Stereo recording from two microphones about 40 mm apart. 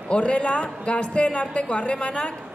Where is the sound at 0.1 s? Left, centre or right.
Left.